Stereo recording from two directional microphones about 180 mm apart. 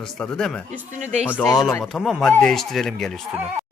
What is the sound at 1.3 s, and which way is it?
A man's voice, 5° left (ahead or behind).